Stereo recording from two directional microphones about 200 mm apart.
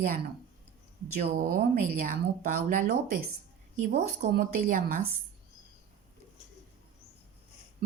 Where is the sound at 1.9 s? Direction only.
45° right (ahead or behind).